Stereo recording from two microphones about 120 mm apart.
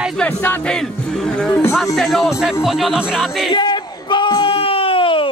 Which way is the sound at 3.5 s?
40° left (ahead or behind).